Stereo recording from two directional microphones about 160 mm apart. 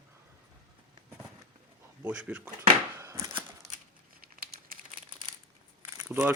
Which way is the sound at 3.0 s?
20° right (ahead or behind).